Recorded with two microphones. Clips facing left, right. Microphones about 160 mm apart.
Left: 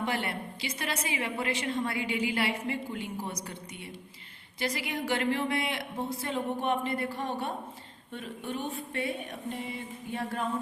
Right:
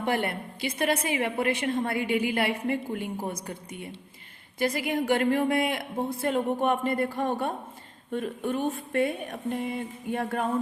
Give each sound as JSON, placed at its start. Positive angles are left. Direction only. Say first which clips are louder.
{"t": 0.0, "sound": "a woman's voice", "louder": "right 4 dB", "side_deg": -50}